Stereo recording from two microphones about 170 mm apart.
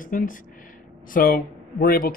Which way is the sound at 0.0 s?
55° left (ahead or behind).